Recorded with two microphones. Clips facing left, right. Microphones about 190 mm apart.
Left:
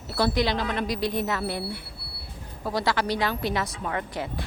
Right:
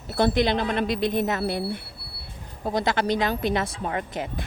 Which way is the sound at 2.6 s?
20° right (ahead or behind).